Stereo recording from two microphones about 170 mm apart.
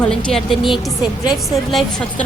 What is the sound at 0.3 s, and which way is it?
Speech, centre (ahead or behind).